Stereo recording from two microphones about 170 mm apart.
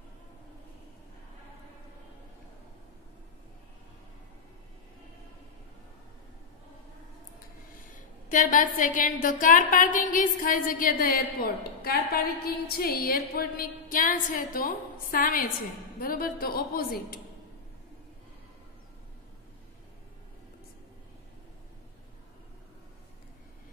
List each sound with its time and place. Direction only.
8.3 s a woman's voice: 50° left (ahead or behind)